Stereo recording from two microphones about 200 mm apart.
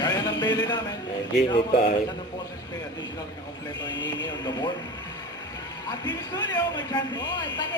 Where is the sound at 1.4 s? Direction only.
25° left (ahead or behind).